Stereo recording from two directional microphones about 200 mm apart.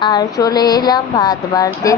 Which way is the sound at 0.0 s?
20° left (ahead or behind).